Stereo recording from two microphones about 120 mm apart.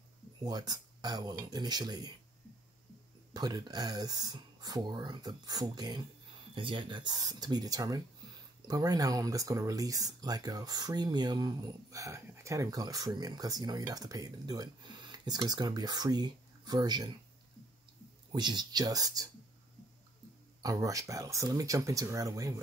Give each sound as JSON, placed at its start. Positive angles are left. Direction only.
{"t": 0.4, "sound": "speech", "side_deg": -35}
{"t": 3.3, "sound": "speech", "side_deg": -35}
{"t": 18.3, "sound": "speech", "side_deg": -35}
{"t": 20.6, "sound": "speech", "side_deg": -30}